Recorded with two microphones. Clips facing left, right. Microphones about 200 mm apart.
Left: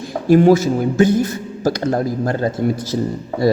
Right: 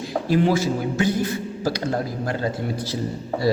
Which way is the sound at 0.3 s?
50° left (ahead or behind).